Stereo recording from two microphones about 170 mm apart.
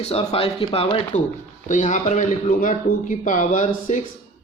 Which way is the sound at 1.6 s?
45° left (ahead or behind).